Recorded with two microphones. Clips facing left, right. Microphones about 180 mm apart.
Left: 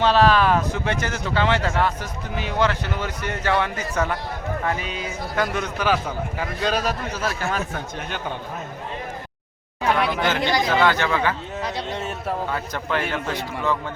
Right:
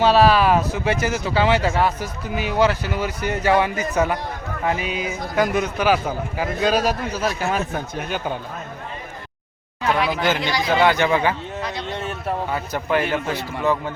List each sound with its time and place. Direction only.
0.0 s speech: 10° right (ahead or behind)
10.1 s speech: 10° right (ahead or behind)
10.3 s speech: 50° left (ahead or behind)
10.7 s speech: 15° right (ahead or behind)
11.9 s a sound: centre (ahead or behind)
12.5 s speech: 10° right (ahead or behind)